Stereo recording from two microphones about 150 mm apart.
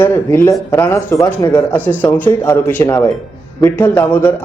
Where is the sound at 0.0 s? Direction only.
15° left (ahead or behind).